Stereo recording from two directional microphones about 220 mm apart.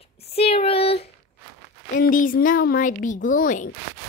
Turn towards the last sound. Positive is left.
turn(degrees=35)  # may be behind; listen again after turning